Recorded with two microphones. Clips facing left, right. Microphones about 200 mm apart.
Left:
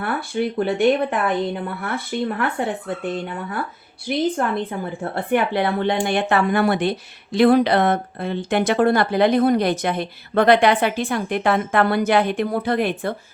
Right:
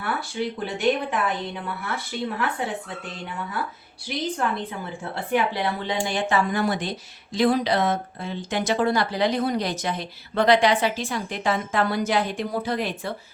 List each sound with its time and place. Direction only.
0.0 s a woman's voice: 55° left (ahead or behind)